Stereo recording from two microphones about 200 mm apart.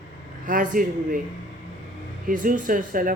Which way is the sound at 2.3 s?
40° right (ahead or behind).